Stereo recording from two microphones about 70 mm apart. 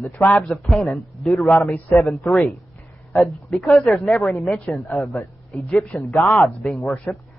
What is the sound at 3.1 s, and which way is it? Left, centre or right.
A woman's voice, centre.